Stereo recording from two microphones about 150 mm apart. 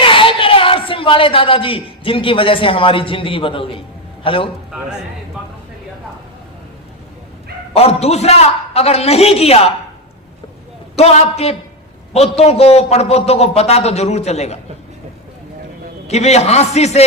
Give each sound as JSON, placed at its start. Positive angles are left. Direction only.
{"t": 0.0, "sound": "a woman's voice", "side_deg": 35}
{"t": 7.7, "sound": "a man's voice", "side_deg": 40}
{"t": 10.9, "sound": "a man's voice", "side_deg": 45}
{"t": 16.0, "sound": "a man's voice", "side_deg": 45}